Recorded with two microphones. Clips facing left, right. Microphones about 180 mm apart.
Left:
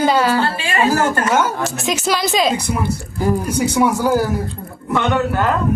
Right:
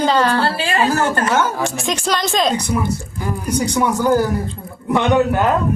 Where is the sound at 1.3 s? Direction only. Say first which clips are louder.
Even; 5° left (ahead or behind).